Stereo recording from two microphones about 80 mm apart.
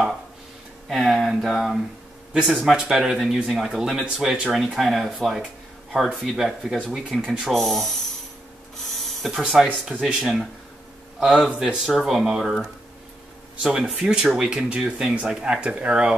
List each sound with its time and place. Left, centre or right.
0.8 s speech: centre
8.8 s a sound: centre
9.8 s speech: centre